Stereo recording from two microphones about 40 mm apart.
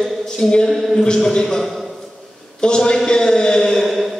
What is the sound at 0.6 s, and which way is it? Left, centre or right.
Speech, centre.